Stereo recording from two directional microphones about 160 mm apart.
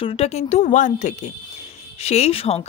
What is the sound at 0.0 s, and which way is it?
Speech, 40° left (ahead or behind).